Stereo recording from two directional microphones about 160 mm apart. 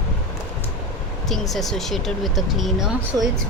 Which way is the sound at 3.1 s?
20° right (ahead or behind).